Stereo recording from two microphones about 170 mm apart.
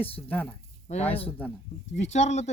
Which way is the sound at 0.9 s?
40° left (ahead or behind).